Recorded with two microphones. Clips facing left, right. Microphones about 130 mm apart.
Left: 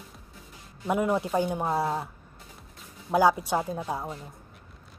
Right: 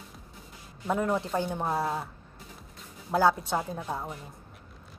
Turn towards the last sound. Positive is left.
turn(degrees=10)  # may be behind; listen again after turning